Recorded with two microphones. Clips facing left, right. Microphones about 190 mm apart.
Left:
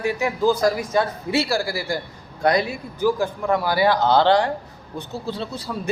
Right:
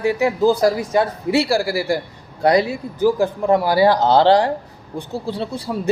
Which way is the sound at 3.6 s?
35° right (ahead or behind).